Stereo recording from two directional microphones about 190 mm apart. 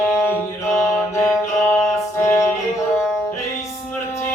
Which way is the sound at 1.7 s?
15° left (ahead or behind).